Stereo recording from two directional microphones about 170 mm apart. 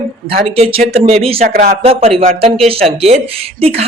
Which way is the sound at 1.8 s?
35° right (ahead or behind).